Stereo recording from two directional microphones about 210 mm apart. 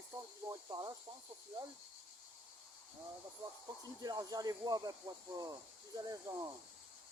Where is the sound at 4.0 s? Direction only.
15° right (ahead or behind).